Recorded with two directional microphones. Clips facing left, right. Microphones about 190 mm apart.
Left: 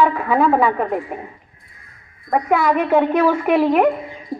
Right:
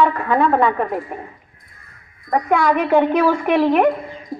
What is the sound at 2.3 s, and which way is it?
Speech, 5° left (ahead or behind).